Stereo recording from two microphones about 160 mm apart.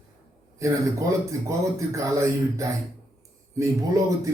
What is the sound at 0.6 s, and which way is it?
Speech, 20° right (ahead or behind).